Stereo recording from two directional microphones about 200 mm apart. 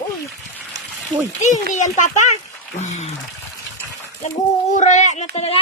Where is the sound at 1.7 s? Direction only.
35° left (ahead or behind).